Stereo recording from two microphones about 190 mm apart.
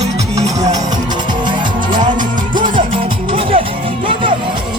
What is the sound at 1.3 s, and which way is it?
Music, 25° right (ahead or behind).